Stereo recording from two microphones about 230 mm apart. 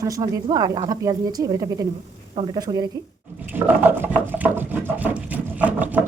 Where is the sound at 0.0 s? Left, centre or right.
Centre.